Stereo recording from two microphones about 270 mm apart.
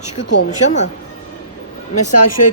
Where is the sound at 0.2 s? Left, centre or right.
Left.